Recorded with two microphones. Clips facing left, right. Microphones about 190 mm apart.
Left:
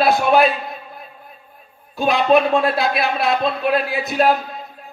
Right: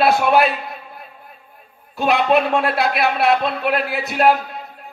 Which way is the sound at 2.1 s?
65° right (ahead or behind).